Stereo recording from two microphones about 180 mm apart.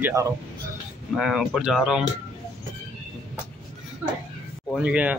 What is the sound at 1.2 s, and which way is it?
Speech, centre (ahead or behind).